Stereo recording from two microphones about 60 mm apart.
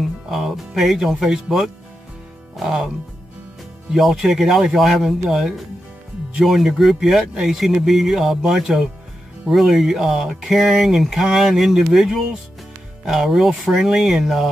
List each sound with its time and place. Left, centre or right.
0.0 s speech: centre
3.9 s speech: centre